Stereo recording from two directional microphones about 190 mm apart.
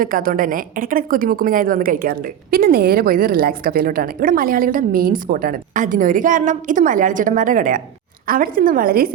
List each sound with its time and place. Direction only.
0.0 s a woman's voice: 50° right (ahead or behind)